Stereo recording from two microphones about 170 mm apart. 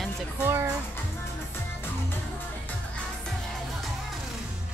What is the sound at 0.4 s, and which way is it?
Music, 15° right (ahead or behind).